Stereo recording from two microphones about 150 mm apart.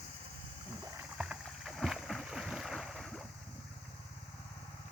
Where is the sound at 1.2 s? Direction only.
5° right (ahead or behind).